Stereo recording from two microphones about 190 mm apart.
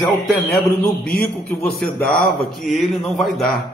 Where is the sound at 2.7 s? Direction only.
Centre (ahead or behind).